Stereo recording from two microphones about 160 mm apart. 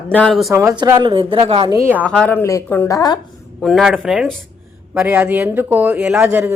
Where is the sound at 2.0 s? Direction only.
10° left (ahead or behind).